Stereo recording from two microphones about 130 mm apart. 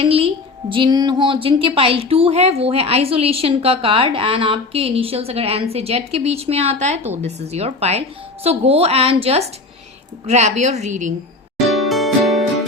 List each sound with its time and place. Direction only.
0.0 s a sound: 45° right (ahead or behind)
0.7 s a woman's voice: 35° right (ahead or behind)
10.2 s a woman's voice: 60° right (ahead or behind)
11.7 s music: centre (ahead or behind)